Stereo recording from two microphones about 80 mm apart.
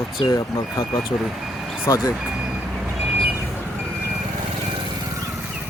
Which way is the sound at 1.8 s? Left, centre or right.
Left.